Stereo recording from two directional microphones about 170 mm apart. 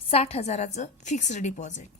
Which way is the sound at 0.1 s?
35° left (ahead or behind).